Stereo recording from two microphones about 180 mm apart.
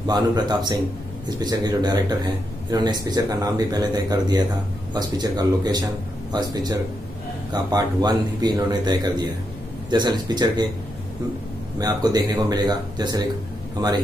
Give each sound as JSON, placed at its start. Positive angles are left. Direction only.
{"t": 0.0, "sound": "speech", "side_deg": -25}
{"t": 11.8, "sound": "speech", "side_deg": -20}